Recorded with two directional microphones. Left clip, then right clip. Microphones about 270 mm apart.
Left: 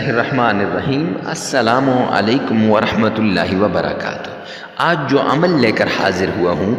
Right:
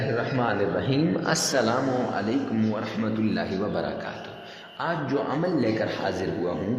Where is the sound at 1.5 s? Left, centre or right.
Left.